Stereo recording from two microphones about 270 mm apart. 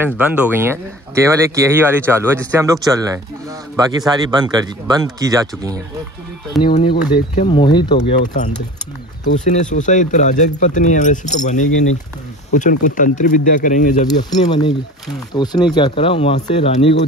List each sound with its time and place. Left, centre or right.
0.0 s speech: centre
6.5 s speech: centre
7.4 s speech: centre
7.9 s speech: left
15.3 s speech: centre